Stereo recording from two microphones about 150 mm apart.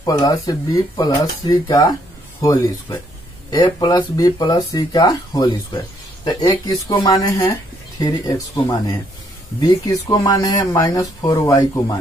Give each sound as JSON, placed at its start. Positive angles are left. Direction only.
{"t": 0.0, "sound": "speech", "side_deg": 25}